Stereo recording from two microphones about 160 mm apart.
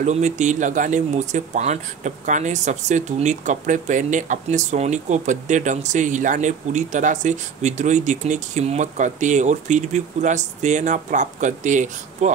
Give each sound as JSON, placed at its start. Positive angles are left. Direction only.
{"t": 0.0, "sound": "speech", "side_deg": -45}